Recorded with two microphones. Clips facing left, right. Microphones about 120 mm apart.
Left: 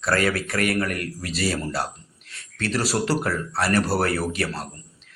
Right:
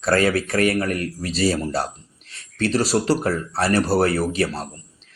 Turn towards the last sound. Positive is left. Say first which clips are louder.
# right 4 dB
turn(degrees=-30)  # may be behind; listen again after turning